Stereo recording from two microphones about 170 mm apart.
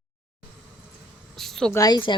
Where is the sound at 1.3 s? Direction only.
Centre (ahead or behind).